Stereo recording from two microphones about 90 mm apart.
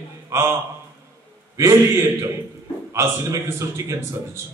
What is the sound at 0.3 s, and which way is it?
Speech, 35° right (ahead or behind).